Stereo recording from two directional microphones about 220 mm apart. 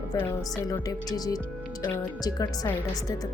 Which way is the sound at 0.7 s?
15° left (ahead or behind).